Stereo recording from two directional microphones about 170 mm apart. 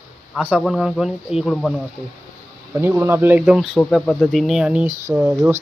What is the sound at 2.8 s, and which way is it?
Speech, 15° right (ahead or behind).